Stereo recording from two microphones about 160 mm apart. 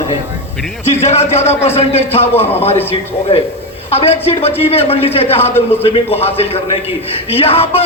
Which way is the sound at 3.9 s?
40° left (ahead or behind).